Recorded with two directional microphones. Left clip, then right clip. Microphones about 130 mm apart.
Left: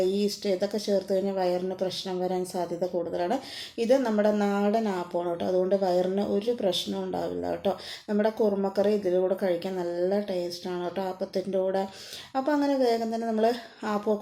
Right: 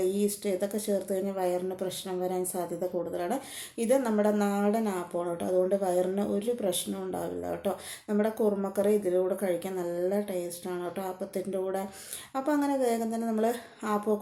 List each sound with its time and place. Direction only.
0.0 s a woman's voice: 20° left (ahead or behind)